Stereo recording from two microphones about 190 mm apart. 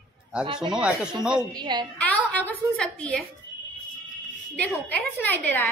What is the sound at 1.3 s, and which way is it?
Speech, 25° right (ahead or behind).